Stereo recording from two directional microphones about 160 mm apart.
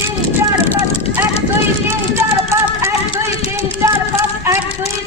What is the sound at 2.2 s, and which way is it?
Run, 15° right (ahead or behind).